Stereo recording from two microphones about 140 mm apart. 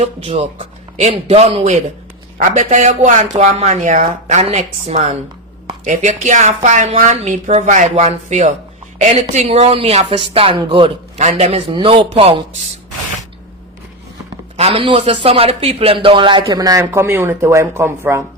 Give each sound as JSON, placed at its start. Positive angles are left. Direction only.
{"t": 1.1, "sound": "a man's voice", "side_deg": -45}
{"t": 2.4, "sound": "speech", "side_deg": -60}
{"t": 4.4, "sound": "a man's voice", "side_deg": -50}
{"t": 5.8, "sound": "a woman's voice", "side_deg": -60}
{"t": 10.2, "sound": "speech", "side_deg": -40}
{"t": 11.2, "sound": "a man's voice", "side_deg": -55}
{"t": 14.5, "sound": "a man's voice", "side_deg": -45}